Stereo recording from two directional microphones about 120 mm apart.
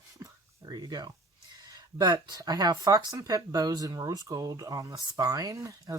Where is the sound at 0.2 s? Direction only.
35° right (ahead or behind).